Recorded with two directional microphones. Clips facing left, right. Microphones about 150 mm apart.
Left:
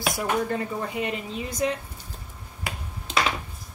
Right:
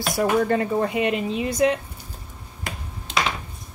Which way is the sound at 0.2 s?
70° right (ahead or behind).